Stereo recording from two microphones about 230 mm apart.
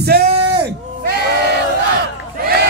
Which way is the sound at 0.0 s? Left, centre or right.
Right.